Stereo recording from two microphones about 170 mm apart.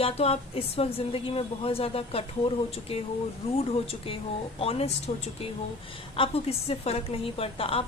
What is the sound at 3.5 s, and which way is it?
A woman's voice, 35° left (ahead or behind).